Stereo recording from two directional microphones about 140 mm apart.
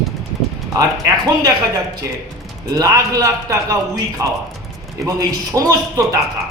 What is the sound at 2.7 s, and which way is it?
A man's voice, 25° right (ahead or behind).